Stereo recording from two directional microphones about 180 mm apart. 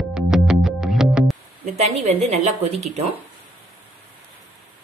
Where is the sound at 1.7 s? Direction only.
40° right (ahead or behind).